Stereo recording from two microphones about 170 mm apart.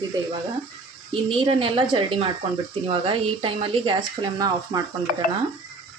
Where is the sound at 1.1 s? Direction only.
30° right (ahead or behind).